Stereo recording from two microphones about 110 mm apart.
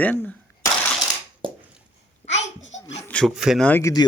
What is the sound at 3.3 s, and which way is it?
Speech, 5° right (ahead or behind).